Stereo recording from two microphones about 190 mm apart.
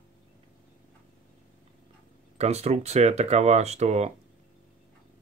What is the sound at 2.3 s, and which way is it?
Speech, 35° right (ahead or behind).